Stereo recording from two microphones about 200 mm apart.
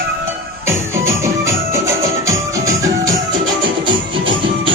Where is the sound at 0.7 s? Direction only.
15° right (ahead or behind).